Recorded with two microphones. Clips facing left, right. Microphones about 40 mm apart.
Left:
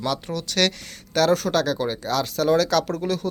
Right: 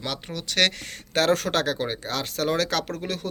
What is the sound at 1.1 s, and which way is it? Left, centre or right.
Speech, right.